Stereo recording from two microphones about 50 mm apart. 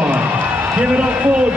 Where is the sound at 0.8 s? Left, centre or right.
Right.